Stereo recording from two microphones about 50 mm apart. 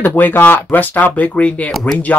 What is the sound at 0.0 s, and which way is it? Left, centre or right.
Speech, left.